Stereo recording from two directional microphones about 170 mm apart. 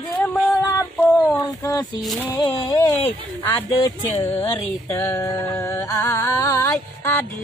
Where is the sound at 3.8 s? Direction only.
15° left (ahead or behind).